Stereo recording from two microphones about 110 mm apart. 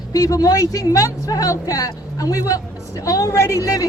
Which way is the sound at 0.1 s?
35° left (ahead or behind).